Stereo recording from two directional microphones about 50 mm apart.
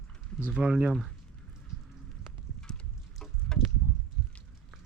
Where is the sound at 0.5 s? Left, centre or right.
Centre.